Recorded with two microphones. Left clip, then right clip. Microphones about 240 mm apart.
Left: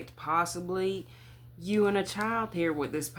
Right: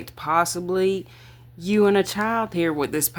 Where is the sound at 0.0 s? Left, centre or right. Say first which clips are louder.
Right 8 dB; right.